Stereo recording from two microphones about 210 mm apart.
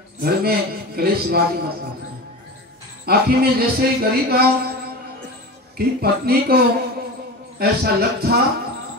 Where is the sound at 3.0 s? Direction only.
50° right (ahead or behind).